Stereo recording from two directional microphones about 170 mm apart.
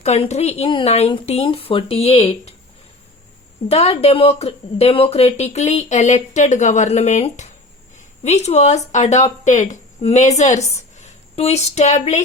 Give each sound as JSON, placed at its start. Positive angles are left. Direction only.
{"t": 0.0, "sound": "a woman's voice", "side_deg": 40}
{"t": 3.7, "sound": "a woman's voice", "side_deg": 40}